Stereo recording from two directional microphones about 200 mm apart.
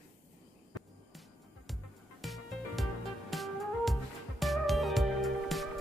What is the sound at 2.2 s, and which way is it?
Music, centre (ahead or behind).